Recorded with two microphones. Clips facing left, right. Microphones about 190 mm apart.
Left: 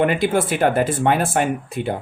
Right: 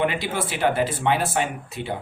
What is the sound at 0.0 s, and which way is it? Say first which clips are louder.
Speech: left 6 dB; 50° left (ahead or behind).